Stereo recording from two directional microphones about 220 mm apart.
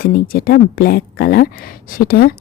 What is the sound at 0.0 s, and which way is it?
A woman's voice, 45° left (ahead or behind).